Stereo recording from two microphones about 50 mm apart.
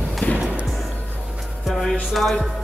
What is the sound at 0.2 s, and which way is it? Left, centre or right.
Music, left.